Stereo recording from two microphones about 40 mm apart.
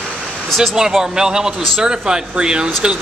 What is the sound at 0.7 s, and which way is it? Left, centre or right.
A man's voice, centre.